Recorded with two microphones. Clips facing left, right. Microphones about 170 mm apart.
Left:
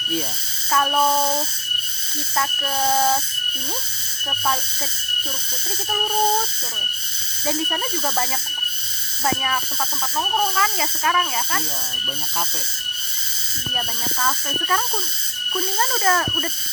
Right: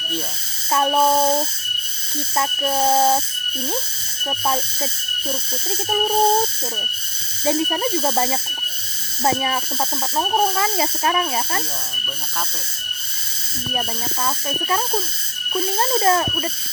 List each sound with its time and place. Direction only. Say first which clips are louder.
0.7 s speech: right 3 dB; 25° right (ahead or behind)
7.4 s speech: right 5 dB; 25° right (ahead or behind)
13.7 s speech: right 2 dB; 20° right (ahead or behind)